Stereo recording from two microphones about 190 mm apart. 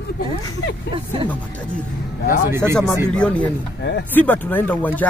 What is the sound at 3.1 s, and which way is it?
Speech, 5° left (ahead or behind).